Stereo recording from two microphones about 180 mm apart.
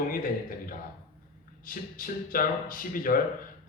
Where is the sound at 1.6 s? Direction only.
50° left (ahead or behind).